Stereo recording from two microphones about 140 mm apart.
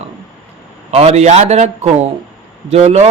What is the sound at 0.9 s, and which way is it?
Speech, 50° right (ahead or behind).